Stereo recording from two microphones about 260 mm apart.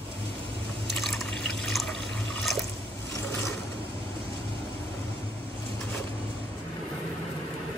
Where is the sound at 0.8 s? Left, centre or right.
Centre.